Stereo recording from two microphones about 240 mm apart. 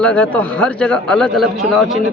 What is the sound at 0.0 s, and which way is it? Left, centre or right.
A man's voice, centre.